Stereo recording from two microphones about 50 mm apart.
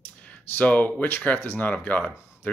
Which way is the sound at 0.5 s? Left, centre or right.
Left.